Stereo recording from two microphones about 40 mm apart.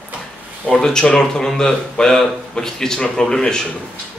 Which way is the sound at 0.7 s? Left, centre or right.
Centre.